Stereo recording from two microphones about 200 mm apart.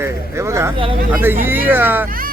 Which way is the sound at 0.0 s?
15° right (ahead or behind).